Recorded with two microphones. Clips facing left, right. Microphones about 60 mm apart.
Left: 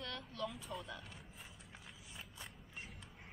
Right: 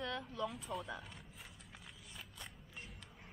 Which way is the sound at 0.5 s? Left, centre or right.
Centre.